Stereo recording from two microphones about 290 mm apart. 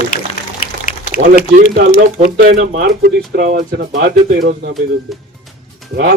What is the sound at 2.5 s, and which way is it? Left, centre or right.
Speech, right.